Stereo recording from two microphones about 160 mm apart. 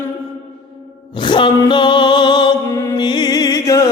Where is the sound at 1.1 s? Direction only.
30° left (ahead or behind).